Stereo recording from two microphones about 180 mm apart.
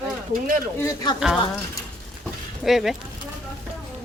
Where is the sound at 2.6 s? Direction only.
Centre (ahead or behind).